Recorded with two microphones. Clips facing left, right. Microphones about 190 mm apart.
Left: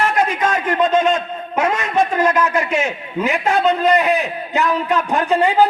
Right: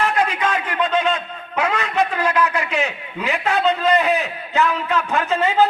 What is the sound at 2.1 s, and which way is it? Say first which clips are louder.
Speech: left 3 dB; 45° left (ahead or behind).